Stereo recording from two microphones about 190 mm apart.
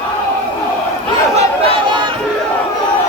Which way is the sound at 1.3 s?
30° right (ahead or behind).